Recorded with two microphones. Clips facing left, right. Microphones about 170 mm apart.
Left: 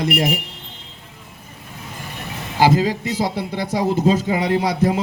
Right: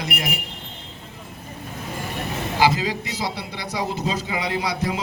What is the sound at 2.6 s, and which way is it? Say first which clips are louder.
A man's voice: left 5 dB; 50° left (ahead or behind).